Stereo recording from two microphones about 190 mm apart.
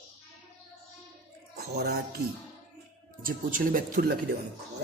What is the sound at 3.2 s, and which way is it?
Speech, 45° right (ahead or behind).